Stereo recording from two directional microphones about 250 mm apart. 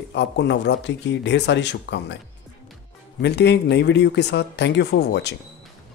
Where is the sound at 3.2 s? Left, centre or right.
Left.